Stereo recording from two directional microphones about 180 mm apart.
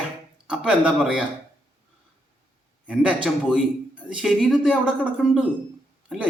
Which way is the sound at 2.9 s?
5° right (ahead or behind).